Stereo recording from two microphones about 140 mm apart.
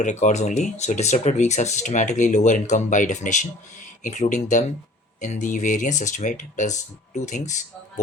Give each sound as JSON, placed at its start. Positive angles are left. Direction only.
{"t": 0.0, "sound": "speech", "side_deg": 60}